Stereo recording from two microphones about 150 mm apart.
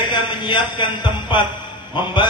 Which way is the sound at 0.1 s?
30° left (ahead or behind).